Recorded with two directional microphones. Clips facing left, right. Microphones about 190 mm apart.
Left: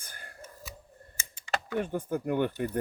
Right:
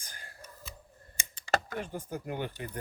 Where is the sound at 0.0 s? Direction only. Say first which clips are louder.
Left 3 dB; 55° left (ahead or behind).